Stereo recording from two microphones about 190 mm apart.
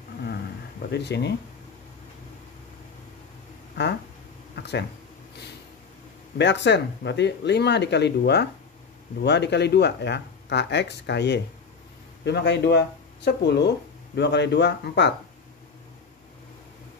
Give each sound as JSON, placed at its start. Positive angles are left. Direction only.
{"t": 0.9, "sound": "speech", "side_deg": 60}
{"t": 4.6, "sound": "a sound", "side_deg": 65}
{"t": 6.3, "sound": "speech", "side_deg": 65}